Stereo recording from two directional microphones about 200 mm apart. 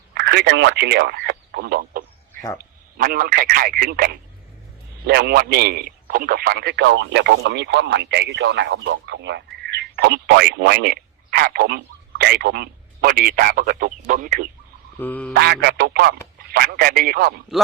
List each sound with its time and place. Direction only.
0.1 s speech: 55° right (ahead or behind)
2.3 s a sound: 15° left (ahead or behind)
2.6 s a man's voice: 45° right (ahead or behind)
14.9 s quack: 10° left (ahead or behind)
15.3 s a man's voice: 55° right (ahead or behind)